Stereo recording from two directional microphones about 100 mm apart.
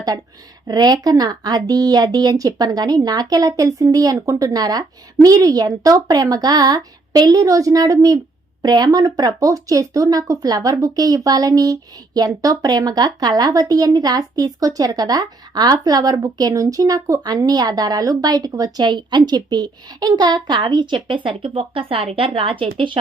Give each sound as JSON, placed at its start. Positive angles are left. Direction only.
{"t": 0.7, "sound": "speech", "side_deg": -40}